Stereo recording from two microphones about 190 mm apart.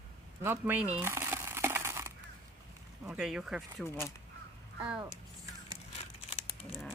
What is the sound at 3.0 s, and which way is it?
Speech, 5° right (ahead or behind).